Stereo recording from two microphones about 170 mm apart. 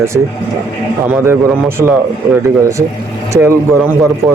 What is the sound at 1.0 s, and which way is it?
Speech, 15° right (ahead or behind).